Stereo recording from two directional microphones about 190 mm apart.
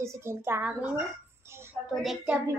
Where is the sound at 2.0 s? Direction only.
Centre (ahead or behind).